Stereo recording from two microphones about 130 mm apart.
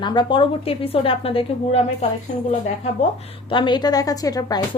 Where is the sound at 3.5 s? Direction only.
35° left (ahead or behind).